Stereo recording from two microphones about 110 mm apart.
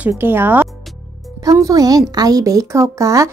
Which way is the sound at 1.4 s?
30° right (ahead or behind).